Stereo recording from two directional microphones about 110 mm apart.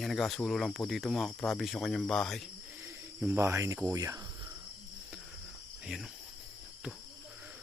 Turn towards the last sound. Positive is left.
turn(degrees=-5)  # may be behind; listen again after turning